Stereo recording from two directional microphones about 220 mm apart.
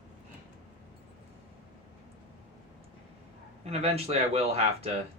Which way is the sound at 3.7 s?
25° right (ahead or behind).